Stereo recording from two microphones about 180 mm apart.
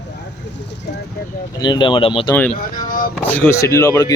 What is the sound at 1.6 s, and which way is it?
Speech, 25° left (ahead or behind).